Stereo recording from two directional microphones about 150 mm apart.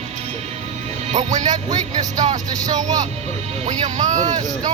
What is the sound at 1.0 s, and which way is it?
Speech, 50° right (ahead or behind).